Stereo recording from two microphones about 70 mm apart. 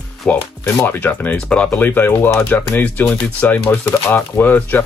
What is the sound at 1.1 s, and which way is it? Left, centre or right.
Speech, left.